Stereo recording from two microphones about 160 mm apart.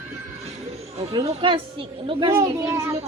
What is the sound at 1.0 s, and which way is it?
Speech, 40° right (ahead or behind).